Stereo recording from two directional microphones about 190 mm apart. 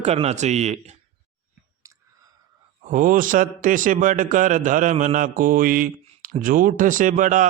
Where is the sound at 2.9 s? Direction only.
45° right (ahead or behind).